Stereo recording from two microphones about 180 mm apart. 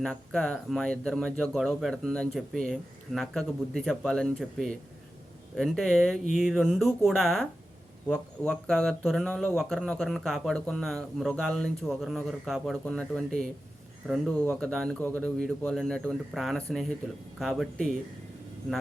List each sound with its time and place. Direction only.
0.0 s speech: 5° left (ahead or behind)